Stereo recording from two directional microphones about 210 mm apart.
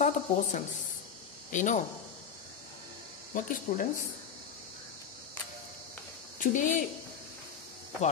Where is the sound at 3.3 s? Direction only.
40° left (ahead or behind).